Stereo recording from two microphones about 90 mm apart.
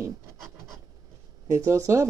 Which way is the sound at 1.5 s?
35° right (ahead or behind).